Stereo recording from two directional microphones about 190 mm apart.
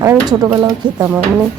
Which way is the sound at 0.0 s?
15° right (ahead or behind).